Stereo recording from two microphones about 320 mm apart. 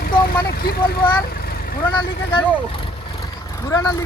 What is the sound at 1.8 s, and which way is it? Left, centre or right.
Speech, centre.